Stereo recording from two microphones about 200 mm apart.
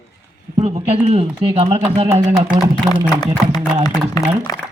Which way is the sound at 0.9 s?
35° right (ahead or behind).